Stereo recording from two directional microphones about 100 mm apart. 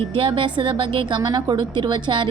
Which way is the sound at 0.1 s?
60° right (ahead or behind).